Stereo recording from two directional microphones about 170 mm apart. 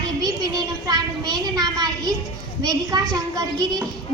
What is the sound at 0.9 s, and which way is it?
A child's voice, 20° right (ahead or behind).